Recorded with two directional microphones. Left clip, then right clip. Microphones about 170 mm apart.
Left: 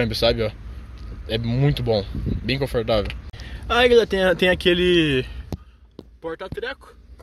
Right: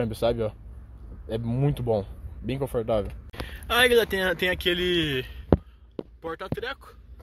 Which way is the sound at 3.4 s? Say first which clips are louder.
Left 3 dB; 5° left (ahead or behind).